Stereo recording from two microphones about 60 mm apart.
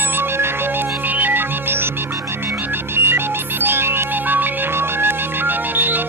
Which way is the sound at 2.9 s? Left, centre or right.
Right.